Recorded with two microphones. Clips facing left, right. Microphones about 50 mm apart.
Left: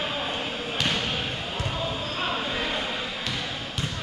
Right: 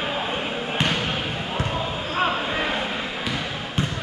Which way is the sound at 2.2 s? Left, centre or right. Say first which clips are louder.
Right 6 dB; right.